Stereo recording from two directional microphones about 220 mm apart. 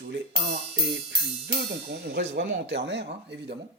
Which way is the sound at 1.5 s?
55° right (ahead or behind).